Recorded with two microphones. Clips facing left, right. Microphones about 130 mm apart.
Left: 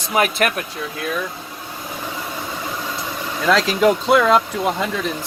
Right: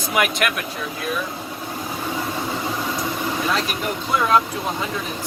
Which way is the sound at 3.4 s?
90° left.